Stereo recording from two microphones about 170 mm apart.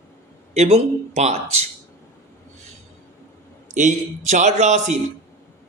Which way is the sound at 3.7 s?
45° right (ahead or behind).